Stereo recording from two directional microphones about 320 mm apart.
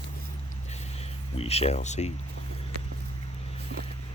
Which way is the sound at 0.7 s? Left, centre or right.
Centre.